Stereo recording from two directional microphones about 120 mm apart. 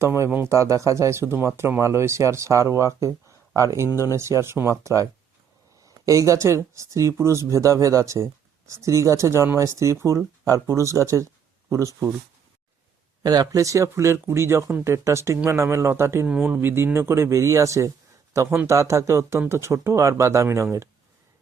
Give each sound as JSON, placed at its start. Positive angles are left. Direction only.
{"t": 0.0, "sound": "speech", "side_deg": -20}
{"t": 3.8, "sound": "speech", "side_deg": 30}
{"t": 4.1, "sound": "speech", "side_deg": -25}
{"t": 13.2, "sound": "speech", "side_deg": -35}
{"t": 16.2, "sound": "speech", "side_deg": -10}